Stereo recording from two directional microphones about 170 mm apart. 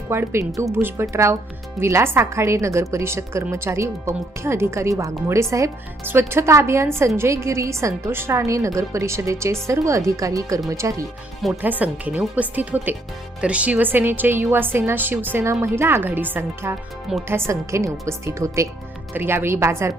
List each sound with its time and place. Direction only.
0.1 s a woman's voice: 15° right (ahead or behind)